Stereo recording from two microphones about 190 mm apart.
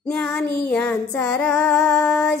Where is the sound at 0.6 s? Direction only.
5° left (ahead or behind).